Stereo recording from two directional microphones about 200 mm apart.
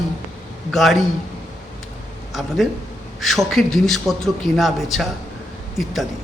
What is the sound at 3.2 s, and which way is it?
A woman's voice, centre (ahead or behind).